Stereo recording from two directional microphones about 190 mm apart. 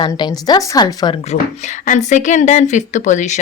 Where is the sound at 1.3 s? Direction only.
40° left (ahead or behind).